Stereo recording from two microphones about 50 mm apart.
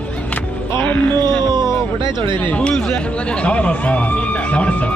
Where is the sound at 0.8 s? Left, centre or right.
Left.